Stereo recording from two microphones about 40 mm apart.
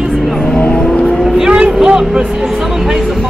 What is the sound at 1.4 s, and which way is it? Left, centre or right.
Speech, right.